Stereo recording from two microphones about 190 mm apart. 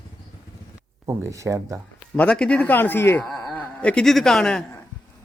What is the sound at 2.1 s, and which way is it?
A man's voice, 5° left (ahead or behind).